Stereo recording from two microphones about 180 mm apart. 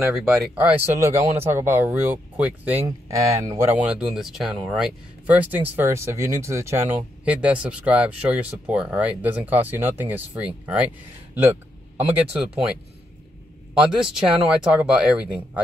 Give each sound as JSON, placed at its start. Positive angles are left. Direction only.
{"t": 0.1, "sound": "speech", "side_deg": -5}
{"t": 0.9, "sound": "speech", "side_deg": -15}
{"t": 13.7, "sound": "speech", "side_deg": -5}